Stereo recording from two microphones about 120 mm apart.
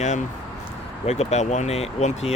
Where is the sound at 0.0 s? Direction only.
85° left.